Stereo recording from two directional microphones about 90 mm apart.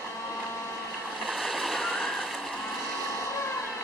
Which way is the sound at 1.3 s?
5° right (ahead or behind).